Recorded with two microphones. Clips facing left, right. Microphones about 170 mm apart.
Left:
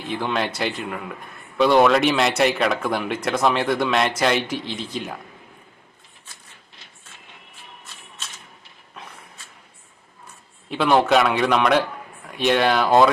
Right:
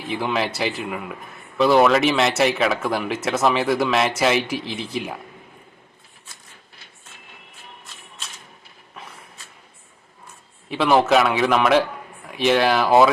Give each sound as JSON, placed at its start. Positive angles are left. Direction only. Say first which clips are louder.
{"t": 0.1, "sound": "a man's voice", "louder": "right 1 dB", "side_deg": -5}
{"t": 10.7, "sound": "a man's voice", "louder": "right 1 dB", "side_deg": 0}